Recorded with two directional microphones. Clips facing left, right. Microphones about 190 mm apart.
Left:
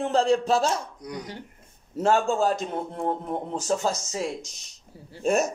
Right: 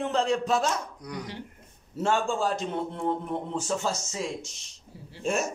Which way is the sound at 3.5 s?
40° left (ahead or behind).